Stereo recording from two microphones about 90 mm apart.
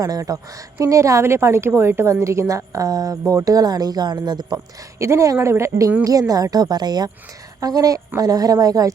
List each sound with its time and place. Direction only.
0.0 s a woman's voice: 40° right (ahead or behind)
4.9 s a woman's voice: 35° right (ahead or behind)